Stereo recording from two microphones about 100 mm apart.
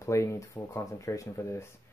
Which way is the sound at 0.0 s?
30° left (ahead or behind).